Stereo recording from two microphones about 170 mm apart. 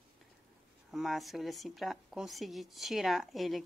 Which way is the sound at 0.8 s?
Centre (ahead or behind).